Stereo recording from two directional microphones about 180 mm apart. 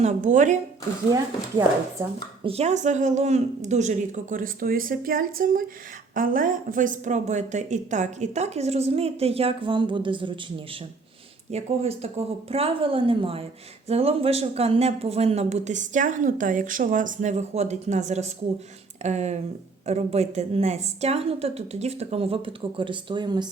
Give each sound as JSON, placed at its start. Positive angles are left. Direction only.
{"t": 0.0, "sound": "speech", "side_deg": -45}
{"t": 1.1, "sound": "speech", "side_deg": -20}
{"t": 2.4, "sound": "speech", "side_deg": -35}
{"t": 11.5, "sound": "speech", "side_deg": -35}